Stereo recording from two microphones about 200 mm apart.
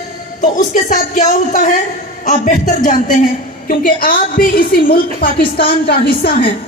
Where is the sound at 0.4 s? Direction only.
40° left (ahead or behind).